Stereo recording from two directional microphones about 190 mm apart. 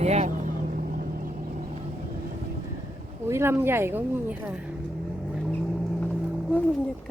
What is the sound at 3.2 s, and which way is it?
Speech, 10° right (ahead or behind).